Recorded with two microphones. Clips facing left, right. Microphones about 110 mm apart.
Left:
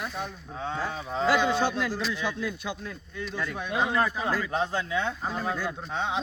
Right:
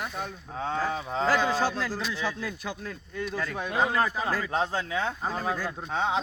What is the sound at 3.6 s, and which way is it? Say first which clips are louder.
Speech: even; 35° right (ahead or behind).